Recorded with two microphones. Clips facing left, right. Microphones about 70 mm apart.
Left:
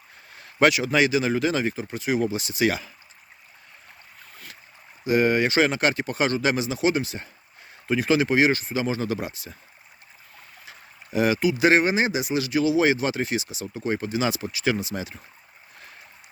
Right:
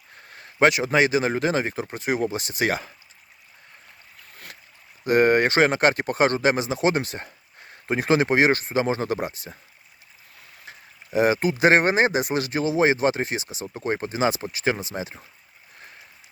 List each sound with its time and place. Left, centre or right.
0.3 s speech: right
1.7 s speech: right
5.0 s speech: right
10.7 s speech: right